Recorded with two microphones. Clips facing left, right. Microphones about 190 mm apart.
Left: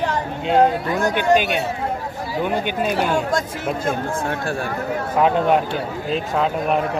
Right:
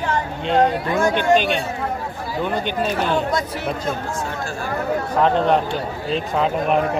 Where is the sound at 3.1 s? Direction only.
45° left (ahead or behind).